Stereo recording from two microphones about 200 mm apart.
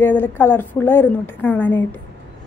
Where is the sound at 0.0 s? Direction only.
10° left (ahead or behind).